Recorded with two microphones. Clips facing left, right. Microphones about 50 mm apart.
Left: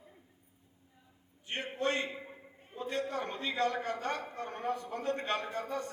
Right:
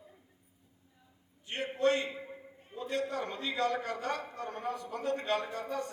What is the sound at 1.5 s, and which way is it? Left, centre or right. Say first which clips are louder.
Speech: right 4 dB; left.